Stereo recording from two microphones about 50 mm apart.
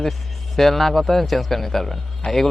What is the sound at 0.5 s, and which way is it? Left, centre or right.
A man's voice, centre.